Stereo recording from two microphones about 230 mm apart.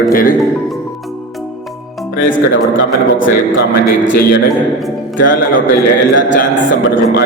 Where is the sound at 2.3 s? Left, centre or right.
Left.